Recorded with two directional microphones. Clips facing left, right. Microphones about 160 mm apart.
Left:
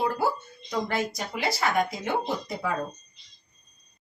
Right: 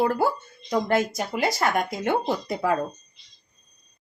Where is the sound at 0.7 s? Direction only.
50° right (ahead or behind).